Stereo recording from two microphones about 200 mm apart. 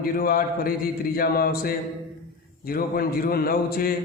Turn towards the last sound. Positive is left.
turn(degrees=45)  # may be behind; listen again after turning